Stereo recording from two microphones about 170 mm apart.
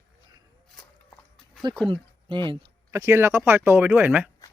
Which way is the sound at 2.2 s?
30° right (ahead or behind).